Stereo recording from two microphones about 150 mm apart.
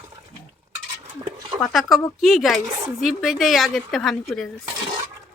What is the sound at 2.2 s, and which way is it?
Speech, centre (ahead or behind).